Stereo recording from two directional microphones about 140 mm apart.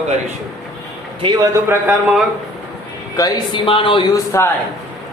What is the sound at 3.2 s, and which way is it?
Speech, 25° left (ahead or behind).